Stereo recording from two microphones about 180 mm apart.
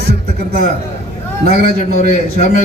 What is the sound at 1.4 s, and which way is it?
A man's voice, 40° left (ahead or behind).